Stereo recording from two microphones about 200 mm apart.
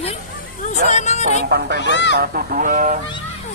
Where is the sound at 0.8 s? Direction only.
35° left (ahead or behind).